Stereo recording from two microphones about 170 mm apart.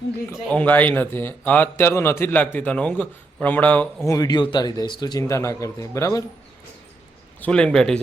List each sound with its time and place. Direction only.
0.3 s a man's voice: 10° left (ahead or behind)
4.1 s speech: 25° left (ahead or behind)
7.4 s a man's voice: 5° left (ahead or behind)